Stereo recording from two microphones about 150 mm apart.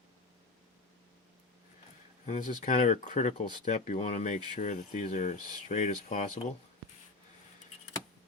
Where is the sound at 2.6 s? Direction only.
50° left (ahead or behind).